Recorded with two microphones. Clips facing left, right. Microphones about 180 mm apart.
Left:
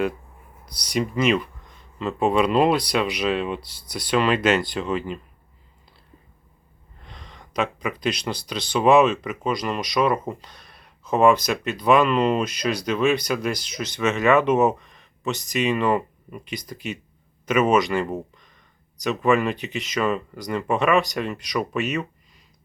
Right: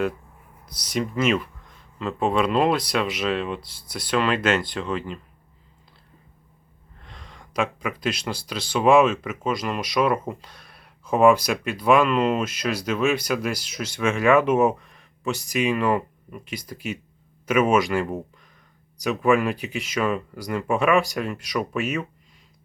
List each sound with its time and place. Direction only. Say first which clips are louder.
0.6 s speech: left 2 dB; centre (ahead or behind)
7.0 s speech: left 1 dB; centre (ahead or behind)